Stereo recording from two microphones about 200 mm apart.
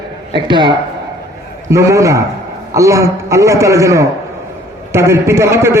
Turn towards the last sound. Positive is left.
turn(degrees=-15)  # may be behind; listen again after turning